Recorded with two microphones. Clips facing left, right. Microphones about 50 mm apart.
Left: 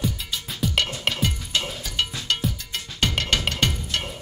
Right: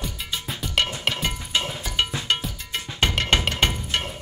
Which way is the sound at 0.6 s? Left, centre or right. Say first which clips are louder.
Left 1 dB; centre.